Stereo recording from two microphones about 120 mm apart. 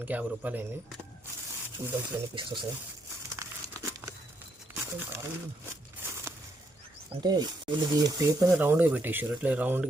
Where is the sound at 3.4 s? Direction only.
25° right (ahead or behind).